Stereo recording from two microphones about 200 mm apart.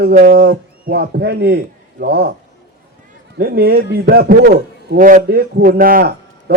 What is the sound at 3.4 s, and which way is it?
Speech, 50° right (ahead or behind).